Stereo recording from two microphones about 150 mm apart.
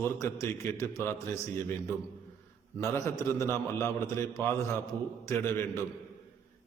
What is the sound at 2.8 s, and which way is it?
A man's voice, 20° left (ahead or behind).